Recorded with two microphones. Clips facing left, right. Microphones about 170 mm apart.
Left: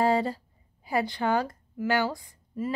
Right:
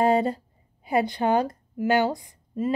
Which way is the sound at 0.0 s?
20° right (ahead or behind).